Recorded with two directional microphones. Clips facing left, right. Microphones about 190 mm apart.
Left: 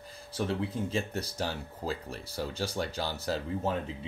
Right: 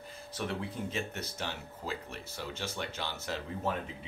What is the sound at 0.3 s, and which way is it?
Speech, 30° left (ahead or behind).